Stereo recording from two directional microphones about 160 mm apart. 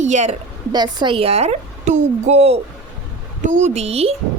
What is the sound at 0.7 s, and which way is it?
A woman's voice, 25° right (ahead or behind).